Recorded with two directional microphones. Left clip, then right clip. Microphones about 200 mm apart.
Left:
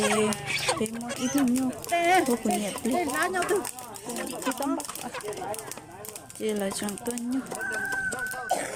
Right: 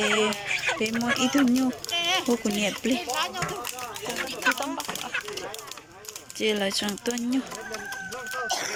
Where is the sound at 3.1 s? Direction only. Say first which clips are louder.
Left 1 dB; 65° left (ahead or behind).